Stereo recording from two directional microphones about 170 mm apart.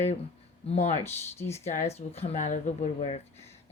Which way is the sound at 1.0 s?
15° left (ahead or behind).